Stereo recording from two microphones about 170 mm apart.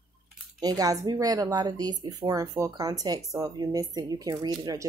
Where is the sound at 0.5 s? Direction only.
20° right (ahead or behind).